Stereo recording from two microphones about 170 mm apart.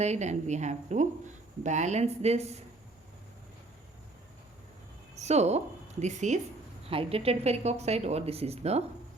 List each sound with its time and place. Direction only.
0.0 s a woman's voice: 40° right (ahead or behind)
5.1 s a woman's voice: 40° right (ahead or behind)